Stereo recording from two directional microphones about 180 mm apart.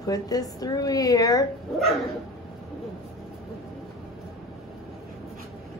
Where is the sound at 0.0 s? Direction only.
20° left (ahead or behind).